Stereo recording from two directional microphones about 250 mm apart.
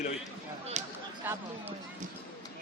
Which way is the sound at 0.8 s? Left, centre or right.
Right.